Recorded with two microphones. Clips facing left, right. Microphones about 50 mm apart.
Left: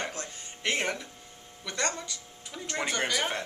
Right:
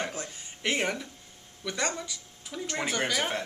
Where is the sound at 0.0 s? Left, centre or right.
Centre.